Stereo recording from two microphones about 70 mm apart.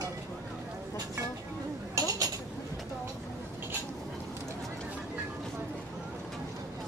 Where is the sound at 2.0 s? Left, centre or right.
Right.